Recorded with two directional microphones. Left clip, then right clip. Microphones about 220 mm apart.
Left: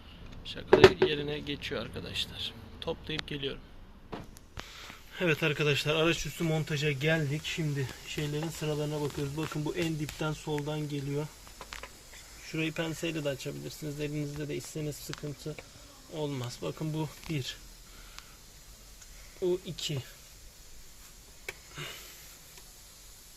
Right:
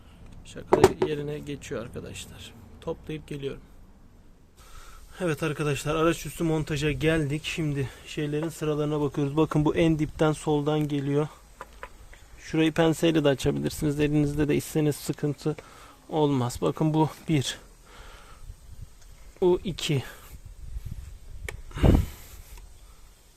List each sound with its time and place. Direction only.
1.0 s speech: 45° right (ahead or behind)
5.1 s speech: 35° right (ahead or behind)
12.5 s speech: 50° right (ahead or behind)
16.1 s speech: 50° right (ahead or behind)
19.4 s speech: 50° right (ahead or behind)
21.8 s a sound: 40° right (ahead or behind)